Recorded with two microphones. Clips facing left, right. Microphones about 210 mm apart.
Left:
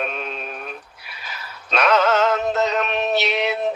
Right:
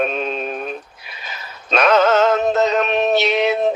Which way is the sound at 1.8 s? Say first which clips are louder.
Right 4 dB; 25° right (ahead or behind).